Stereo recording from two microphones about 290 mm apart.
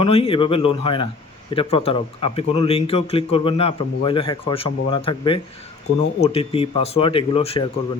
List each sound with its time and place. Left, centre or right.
0.0 s speech: centre